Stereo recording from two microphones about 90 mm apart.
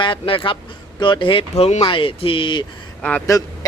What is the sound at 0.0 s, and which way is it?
Speech, 75° left (ahead or behind).